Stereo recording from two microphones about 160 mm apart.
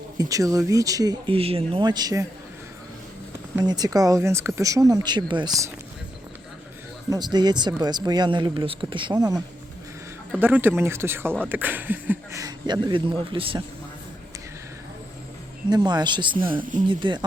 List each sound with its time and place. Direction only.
0.2 s speech: 20° right (ahead or behind)
1.3 s speech: 35° right (ahead or behind)
3.6 s speech: 25° right (ahead or behind)
7.1 s speech: 25° right (ahead or behind)
10.4 s speech: 10° right (ahead or behind); by 13.6 s 35° right (ahead or behind)
15.7 s speech: 25° right (ahead or behind)
16.4 s speech: 60° right (ahead or behind)
16.9 s speech: 30° right (ahead or behind)